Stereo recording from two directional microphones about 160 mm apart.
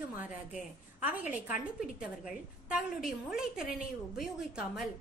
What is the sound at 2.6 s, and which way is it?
A woman's voice, 5° right (ahead or behind).